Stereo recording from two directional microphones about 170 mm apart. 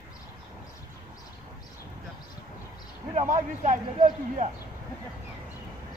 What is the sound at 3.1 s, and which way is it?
Speech, 45° right (ahead or behind).